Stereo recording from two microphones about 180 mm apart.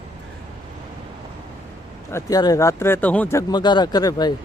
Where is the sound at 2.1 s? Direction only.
20° left (ahead or behind).